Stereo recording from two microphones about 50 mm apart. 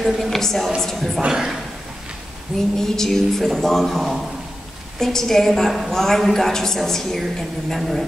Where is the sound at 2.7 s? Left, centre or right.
Centre.